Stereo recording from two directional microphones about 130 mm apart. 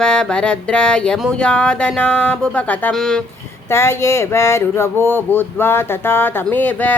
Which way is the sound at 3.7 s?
20° left (ahead or behind).